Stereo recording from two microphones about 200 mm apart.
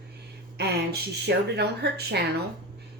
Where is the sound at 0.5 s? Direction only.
55° right (ahead or behind).